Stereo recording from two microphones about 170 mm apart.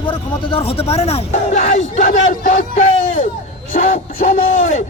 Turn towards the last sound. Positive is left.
turn(degrees=45)  # may be behind; listen again after turning